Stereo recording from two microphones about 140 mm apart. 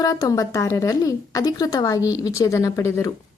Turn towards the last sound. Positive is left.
turn(degrees=20)  # may be behind; listen again after turning